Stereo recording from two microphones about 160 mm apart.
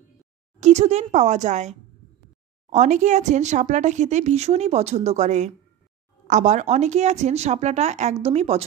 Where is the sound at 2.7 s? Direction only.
50° right (ahead or behind).